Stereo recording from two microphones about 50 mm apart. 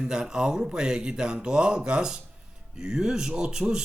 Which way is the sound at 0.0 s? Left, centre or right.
Centre.